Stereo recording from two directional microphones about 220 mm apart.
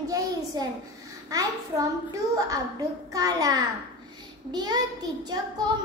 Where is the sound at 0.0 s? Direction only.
15° right (ahead or behind).